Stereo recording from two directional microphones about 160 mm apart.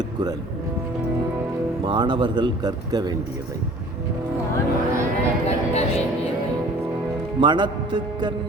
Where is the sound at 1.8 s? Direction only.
30° right (ahead or behind).